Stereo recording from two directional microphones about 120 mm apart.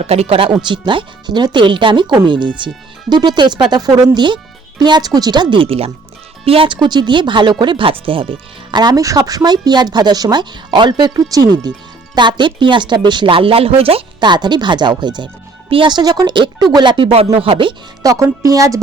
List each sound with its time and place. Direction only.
0.0 s speech: 60° right (ahead or behind)
18.0 s music: 30° right (ahead or behind)